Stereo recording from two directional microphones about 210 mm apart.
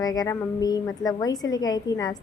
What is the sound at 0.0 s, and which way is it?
A woman's voice, 15° left (ahead or behind).